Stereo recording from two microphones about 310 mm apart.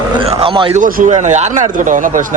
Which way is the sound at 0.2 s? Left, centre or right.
Centre.